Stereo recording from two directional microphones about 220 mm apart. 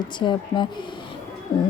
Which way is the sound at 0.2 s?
20° left (ahead or behind).